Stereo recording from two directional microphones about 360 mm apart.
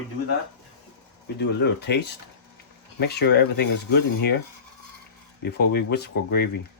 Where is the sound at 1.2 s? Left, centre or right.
Left.